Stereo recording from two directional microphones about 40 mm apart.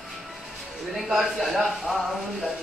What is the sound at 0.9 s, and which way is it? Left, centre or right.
A woman's voice, centre.